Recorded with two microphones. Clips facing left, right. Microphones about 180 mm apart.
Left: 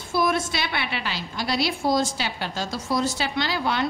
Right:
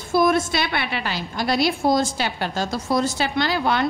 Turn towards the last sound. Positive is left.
turn(degrees=-50)  # may be behind; listen again after turning